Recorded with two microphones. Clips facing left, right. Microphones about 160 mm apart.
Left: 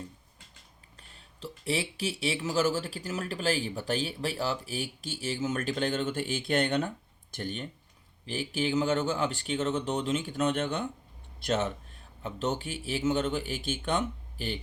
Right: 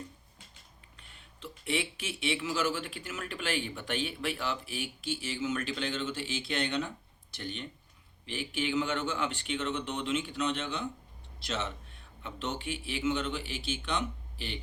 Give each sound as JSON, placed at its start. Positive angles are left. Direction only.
{"t": 0.9, "sound": "speech", "side_deg": 35}